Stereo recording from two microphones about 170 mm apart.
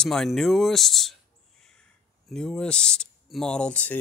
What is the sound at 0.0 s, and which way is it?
Speech, 5° left (ahead or behind).